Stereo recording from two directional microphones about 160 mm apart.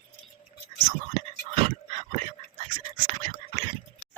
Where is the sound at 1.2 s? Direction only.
40° right (ahead or behind).